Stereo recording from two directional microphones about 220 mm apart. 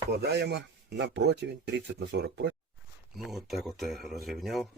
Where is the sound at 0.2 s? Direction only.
50° right (ahead or behind).